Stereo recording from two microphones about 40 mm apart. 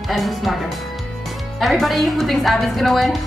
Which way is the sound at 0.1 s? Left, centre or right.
Centre.